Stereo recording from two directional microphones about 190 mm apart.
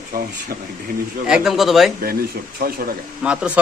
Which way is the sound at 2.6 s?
50° right (ahead or behind).